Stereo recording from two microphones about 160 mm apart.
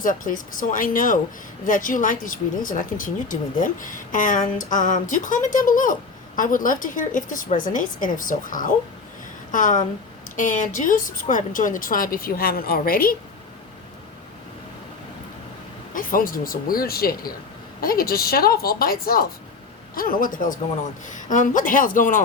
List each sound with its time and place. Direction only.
0.0 s speech: 55° left (ahead or behind)
16.0 s speech: 60° left (ahead or behind)